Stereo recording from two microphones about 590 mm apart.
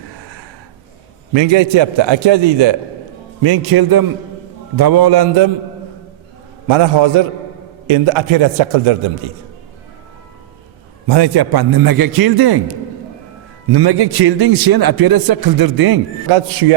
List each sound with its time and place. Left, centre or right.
1.3 s a man's voice: right
6.7 s a man's voice: right
11.1 s a man's voice: right
16.3 s a man's voice: right